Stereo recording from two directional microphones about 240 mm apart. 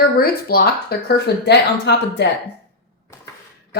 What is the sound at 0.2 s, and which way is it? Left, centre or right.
Speech, left.